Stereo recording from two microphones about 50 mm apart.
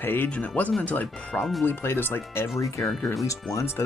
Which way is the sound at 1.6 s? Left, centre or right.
Left.